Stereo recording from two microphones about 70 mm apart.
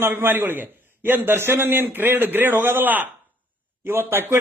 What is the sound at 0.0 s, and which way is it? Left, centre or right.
A man's voice, right.